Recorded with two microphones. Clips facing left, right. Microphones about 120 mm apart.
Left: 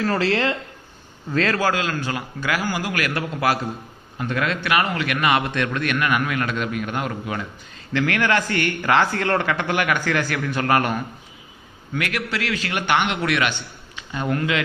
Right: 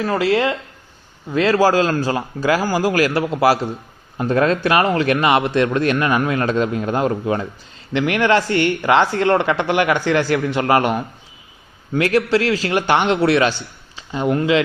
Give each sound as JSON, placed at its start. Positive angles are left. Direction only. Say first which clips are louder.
{"t": 0.0, "sound": "speech", "louder": "right 3 dB", "side_deg": -15}
{"t": 1.5, "sound": "a man's voice", "louder": "right 7 dB", "side_deg": -30}